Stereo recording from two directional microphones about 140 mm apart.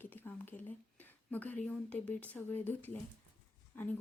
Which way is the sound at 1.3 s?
10° left (ahead or behind).